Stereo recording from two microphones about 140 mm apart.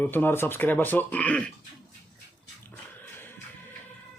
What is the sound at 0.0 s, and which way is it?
Speech, 15° left (ahead or behind).